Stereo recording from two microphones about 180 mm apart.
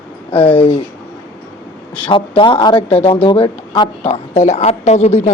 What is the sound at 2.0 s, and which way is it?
A man's voice, 25° left (ahead or behind).